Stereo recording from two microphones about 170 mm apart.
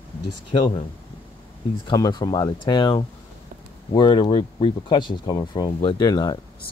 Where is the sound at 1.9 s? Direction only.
25° left (ahead or behind).